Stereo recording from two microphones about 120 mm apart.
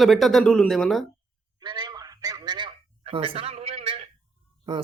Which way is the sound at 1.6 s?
40° right (ahead or behind).